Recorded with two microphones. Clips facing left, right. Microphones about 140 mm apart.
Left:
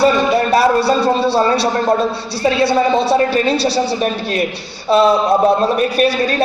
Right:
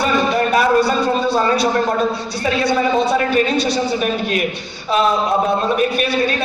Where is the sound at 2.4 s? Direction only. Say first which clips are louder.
Left 4 dB; 30° left (ahead or behind).